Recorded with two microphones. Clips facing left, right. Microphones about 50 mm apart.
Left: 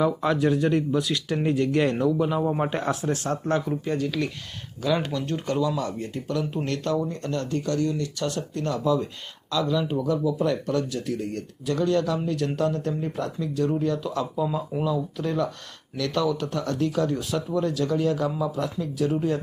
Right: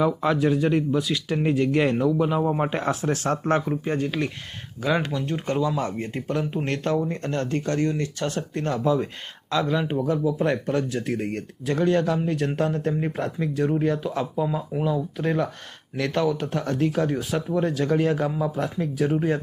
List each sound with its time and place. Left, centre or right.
0.0 s speech: centre
2.7 s speech: right
3.0 s speech: right
3.7 s speech: right; by 5.4 s centre
5.5 s speech: right